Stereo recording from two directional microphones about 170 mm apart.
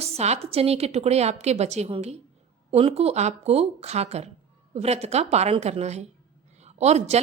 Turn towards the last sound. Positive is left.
turn(degrees=-40)  # may be behind; listen again after turning